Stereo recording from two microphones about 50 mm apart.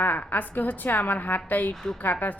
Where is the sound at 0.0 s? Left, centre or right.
Left.